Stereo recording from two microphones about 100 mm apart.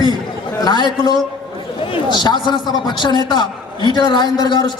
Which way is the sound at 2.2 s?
50° left (ahead or behind).